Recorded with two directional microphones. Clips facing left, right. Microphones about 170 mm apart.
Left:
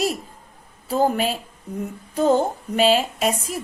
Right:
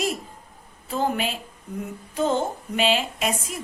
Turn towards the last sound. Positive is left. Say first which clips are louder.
# left 5 dB
turn(degrees=40)  # may be behind; listen again after turning